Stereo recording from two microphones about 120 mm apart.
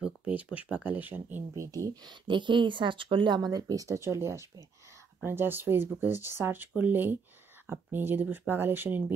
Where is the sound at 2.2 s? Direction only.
40° right (ahead or behind).